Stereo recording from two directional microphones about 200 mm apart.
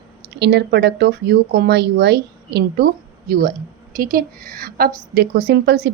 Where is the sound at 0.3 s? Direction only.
55° right (ahead or behind).